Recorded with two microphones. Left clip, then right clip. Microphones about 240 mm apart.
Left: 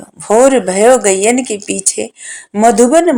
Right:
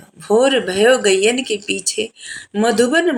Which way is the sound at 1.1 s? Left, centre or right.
Left.